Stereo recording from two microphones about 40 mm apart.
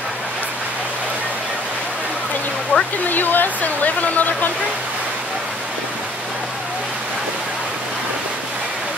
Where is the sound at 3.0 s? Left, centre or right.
Left.